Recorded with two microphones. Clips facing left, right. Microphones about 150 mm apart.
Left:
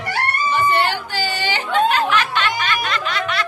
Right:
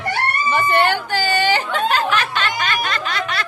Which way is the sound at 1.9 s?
40° right (ahead or behind).